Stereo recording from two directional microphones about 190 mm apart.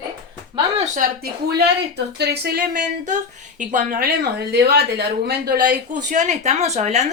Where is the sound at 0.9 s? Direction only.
55° right (ahead or behind).